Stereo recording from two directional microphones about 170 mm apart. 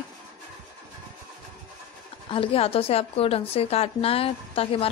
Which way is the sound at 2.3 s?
35° left (ahead or behind).